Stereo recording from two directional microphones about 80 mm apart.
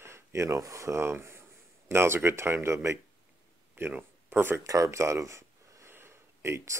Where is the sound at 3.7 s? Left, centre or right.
Right.